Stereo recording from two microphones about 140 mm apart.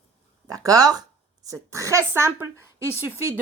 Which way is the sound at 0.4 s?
25° right (ahead or behind).